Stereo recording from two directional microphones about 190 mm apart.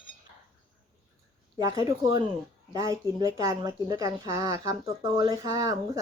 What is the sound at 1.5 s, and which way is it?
Speech, 20° right (ahead or behind).